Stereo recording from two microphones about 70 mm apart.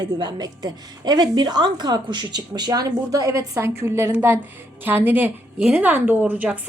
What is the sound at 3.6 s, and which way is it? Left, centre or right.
A woman's voice, right.